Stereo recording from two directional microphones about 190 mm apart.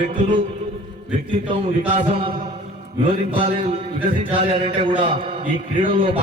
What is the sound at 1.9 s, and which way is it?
Speech, 35° right (ahead or behind).